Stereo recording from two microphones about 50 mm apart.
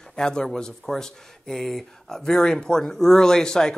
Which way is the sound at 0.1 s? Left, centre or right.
Centre.